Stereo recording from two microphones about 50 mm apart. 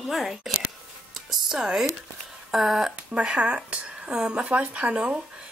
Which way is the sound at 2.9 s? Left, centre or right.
Right.